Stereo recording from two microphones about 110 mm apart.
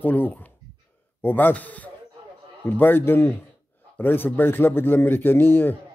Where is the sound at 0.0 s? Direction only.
15° left (ahead or behind).